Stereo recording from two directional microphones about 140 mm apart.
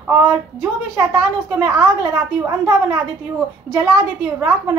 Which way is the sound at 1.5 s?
20° right (ahead or behind).